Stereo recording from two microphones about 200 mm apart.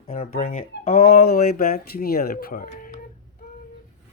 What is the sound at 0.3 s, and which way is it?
Speech, 40° left (ahead or behind).